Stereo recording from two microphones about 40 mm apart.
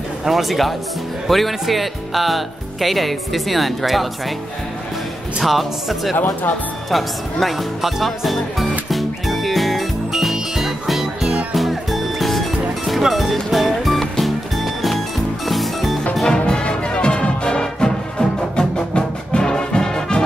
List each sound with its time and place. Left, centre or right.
0.2 s speech: centre
5.4 s speech: centre
6.1 s speech: left
6.9 s music: centre
16.3 s music: left